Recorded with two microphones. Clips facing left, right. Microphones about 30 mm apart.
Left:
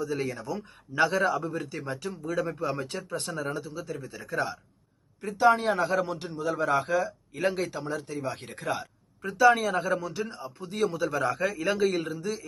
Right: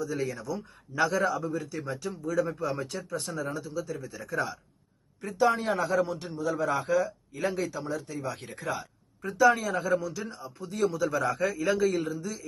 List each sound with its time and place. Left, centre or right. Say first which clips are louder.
0.0 s a man's voice: left 1 dB; left
5.5 s a man's voice: left 1 dB; left
8.5 s a man's voice: left 2 dB; left